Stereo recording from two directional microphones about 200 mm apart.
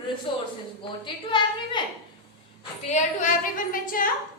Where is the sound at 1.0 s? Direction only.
25° left (ahead or behind).